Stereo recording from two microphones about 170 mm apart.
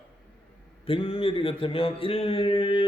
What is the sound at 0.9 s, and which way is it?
Speech, 30° left (ahead or behind).